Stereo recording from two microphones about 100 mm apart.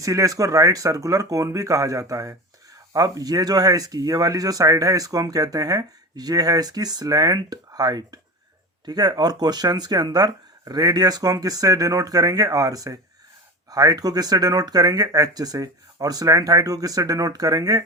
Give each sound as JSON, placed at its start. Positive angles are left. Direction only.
{"t": 0.0, "sound": "speech", "side_deg": -35}